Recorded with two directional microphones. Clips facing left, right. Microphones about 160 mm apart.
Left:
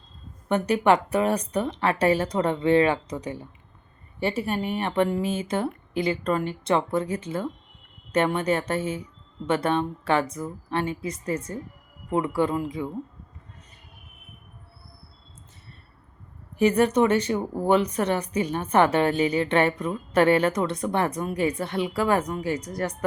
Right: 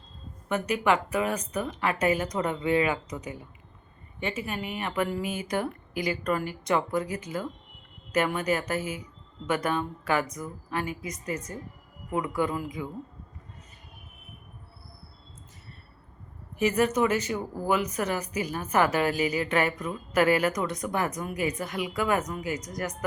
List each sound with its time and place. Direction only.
0.4 s speech: 35° left (ahead or behind)
16.6 s speech: 30° left (ahead or behind)